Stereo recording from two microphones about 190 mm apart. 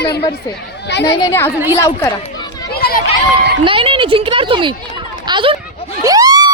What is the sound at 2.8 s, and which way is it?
Run, 55° left (ahead or behind).